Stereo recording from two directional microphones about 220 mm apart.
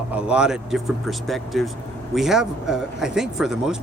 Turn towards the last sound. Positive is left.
turn(degrees=0)  # may be behind; listen again after turning